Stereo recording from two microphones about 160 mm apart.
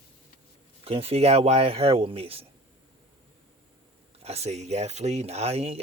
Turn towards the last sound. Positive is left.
turn(degrees=-40)  # may be behind; listen again after turning